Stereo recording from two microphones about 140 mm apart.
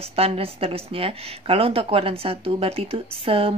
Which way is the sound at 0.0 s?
45° right (ahead or behind).